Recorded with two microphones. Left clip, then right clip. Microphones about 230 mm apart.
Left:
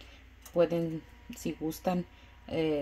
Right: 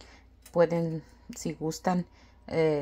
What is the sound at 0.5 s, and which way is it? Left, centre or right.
Speech, right.